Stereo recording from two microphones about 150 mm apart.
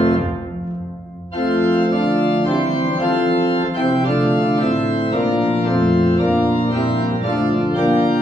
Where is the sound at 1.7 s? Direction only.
35° left (ahead or behind).